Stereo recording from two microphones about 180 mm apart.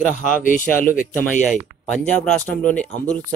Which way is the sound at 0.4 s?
45° left (ahead or behind).